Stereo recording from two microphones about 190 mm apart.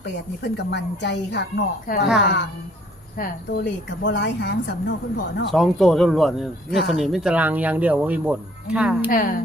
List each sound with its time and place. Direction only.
0.4 s speech: 65° left (ahead or behind)
3.2 s speech: 45° left (ahead or behind)
3.6 s speech: 65° left (ahead or behind)
5.5 s speech: centre (ahead or behind)
9.0 s speech: 45° left (ahead or behind)